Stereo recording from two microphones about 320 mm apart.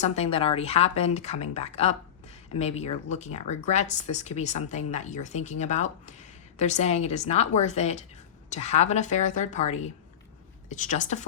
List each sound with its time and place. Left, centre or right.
0.0 s speech: centre